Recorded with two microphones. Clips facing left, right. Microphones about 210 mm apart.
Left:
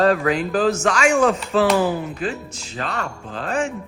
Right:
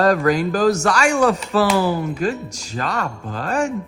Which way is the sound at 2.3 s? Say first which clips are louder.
Right 4 dB; 40° right (ahead or behind).